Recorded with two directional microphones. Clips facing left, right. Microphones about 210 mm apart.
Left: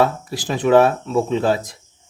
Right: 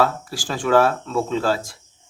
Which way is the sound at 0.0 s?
20° left (ahead or behind).